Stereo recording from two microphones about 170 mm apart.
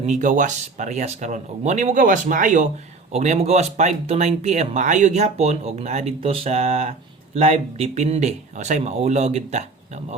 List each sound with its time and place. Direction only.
0.0 s speech: 45° right (ahead or behind)